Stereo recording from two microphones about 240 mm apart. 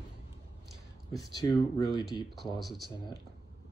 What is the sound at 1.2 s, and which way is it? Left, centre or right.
Speech, centre.